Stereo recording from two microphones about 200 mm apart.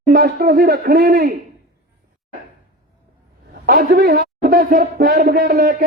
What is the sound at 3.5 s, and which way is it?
A man's voice, 50° right (ahead or behind).